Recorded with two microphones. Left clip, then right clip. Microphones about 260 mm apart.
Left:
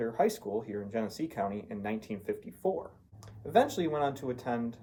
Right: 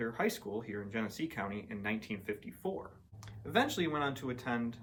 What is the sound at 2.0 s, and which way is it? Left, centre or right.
Speech, centre.